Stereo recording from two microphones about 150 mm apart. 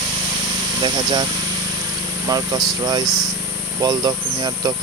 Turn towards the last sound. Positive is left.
turn(degrees=-25)  # may be behind; listen again after turning